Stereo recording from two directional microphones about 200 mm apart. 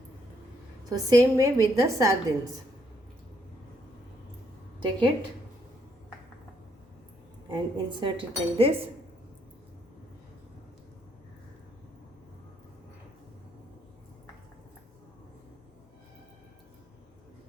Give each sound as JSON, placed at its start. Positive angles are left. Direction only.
{"t": 0.9, "sound": "a woman's voice", "side_deg": -15}
{"t": 4.8, "sound": "speech", "side_deg": -25}
{"t": 7.4, "sound": "speech", "side_deg": -25}